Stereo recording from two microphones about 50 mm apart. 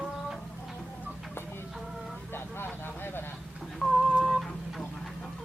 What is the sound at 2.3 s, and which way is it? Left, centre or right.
Speech, left.